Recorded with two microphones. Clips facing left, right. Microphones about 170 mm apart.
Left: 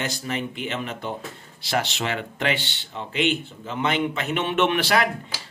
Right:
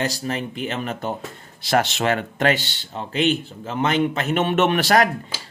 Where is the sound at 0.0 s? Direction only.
40° right (ahead or behind).